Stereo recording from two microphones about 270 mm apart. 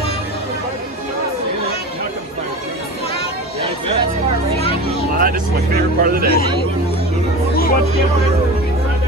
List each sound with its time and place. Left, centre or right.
5.1 s speech: right
7.5 s music: left